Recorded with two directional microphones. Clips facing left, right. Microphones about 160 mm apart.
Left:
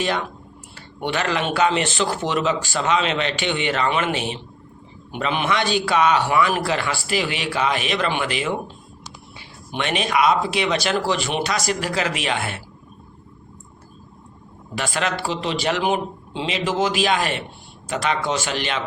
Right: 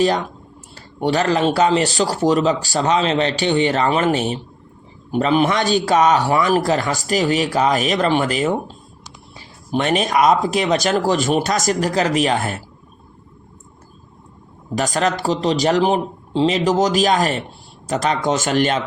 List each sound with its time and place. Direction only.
0.8 s speech: 35° right (ahead or behind)
14.8 s speech: 40° right (ahead or behind)